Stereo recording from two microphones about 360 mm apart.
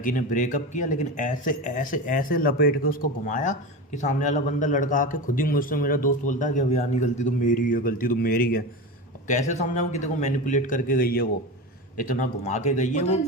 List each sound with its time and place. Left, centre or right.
0.0 s speech: left